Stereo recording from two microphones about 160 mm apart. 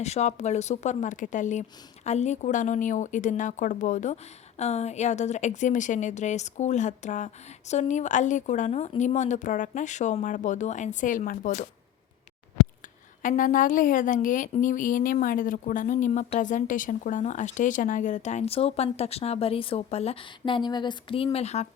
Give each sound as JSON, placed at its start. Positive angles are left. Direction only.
{"t": 0.0, "sound": "speech", "side_deg": 45}
{"t": 13.2, "sound": "speech", "side_deg": 55}
{"t": 21.3, "sound": "speech", "side_deg": 45}